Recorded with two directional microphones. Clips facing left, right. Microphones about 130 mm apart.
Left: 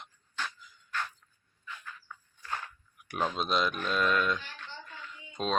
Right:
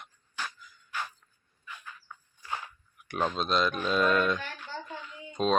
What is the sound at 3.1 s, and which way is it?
Speech, centre (ahead or behind).